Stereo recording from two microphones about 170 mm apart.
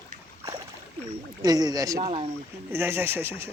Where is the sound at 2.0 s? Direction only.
35° right (ahead or behind).